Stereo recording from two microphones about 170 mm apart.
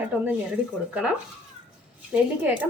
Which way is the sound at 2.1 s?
10° right (ahead or behind).